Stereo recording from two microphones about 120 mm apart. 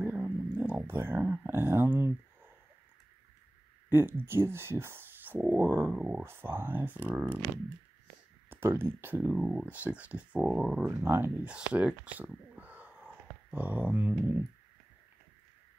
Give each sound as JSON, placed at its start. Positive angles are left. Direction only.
{"t": 0.0, "sound": "a sound", "side_deg": -15}
{"t": 3.9, "sound": "speech", "side_deg": -20}
{"t": 6.2, "sound": "speech", "side_deg": -20}
{"t": 8.5, "sound": "speech", "side_deg": -20}
{"t": 9.3, "sound": "speech", "side_deg": -5}
{"t": 11.1, "sound": "speech", "side_deg": -20}